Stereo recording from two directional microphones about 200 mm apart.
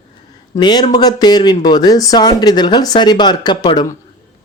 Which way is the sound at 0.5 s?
20° left (ahead or behind).